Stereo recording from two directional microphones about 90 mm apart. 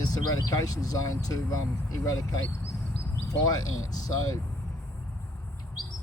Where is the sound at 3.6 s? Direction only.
40° left (ahead or behind).